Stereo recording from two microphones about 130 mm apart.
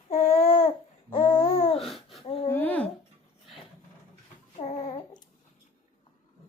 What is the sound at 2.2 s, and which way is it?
Speech, 45° left (ahead or behind).